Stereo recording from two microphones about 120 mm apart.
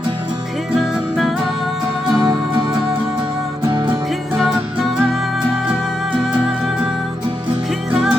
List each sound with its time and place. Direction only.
2.1 s music: 40° right (ahead or behind)
3.7 s music: 40° right (ahead or behind)
4.4 s music: centre (ahead or behind)